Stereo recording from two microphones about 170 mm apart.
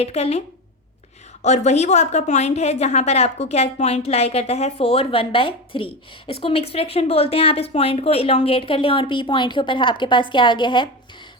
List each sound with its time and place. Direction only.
0.0 s a woman's voice: 35° left (ahead or behind)